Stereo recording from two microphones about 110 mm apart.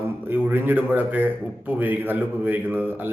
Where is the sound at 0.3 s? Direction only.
15° right (ahead or behind).